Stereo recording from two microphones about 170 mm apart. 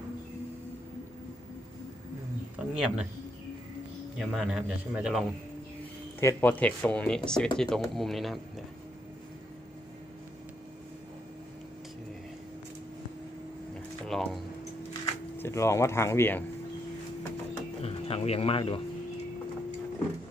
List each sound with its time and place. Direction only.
2.6 s speech: 5° right (ahead or behind)
4.2 s a man's voice: 5° right (ahead or behind)
6.1 s a man's voice: 10° left (ahead or behind)
14.0 s a sound: centre (ahead or behind)
15.3 s speech: 15° left (ahead or behind)
17.8 s speech: 35° left (ahead or behind)